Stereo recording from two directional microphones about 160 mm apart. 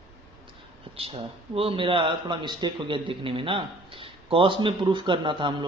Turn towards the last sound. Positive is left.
turn(degrees=-30)  # may be behind; listen again after turning